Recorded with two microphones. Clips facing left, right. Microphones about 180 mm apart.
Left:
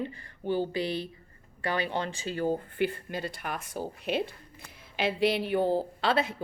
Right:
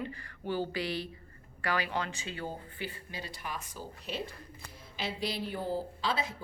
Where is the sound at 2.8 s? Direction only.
55° left (ahead or behind).